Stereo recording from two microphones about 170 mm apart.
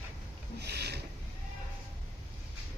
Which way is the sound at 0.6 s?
75° right (ahead or behind).